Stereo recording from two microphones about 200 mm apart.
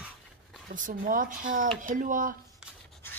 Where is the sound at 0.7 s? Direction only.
40° right (ahead or behind).